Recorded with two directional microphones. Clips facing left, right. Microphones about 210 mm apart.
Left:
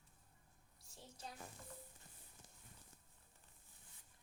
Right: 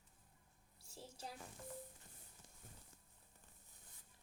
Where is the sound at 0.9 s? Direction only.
30° right (ahead or behind).